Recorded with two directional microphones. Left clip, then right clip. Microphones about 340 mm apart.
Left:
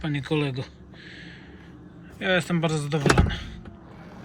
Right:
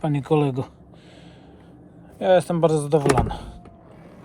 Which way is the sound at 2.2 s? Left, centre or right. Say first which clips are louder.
Right 7 dB; centre.